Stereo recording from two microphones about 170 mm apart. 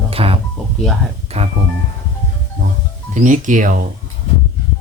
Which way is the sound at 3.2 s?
45° right (ahead or behind).